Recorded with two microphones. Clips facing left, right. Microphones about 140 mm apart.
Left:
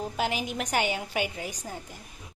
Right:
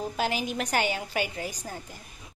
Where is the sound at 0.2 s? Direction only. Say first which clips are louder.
Right 1 dB; 15° left (ahead or behind).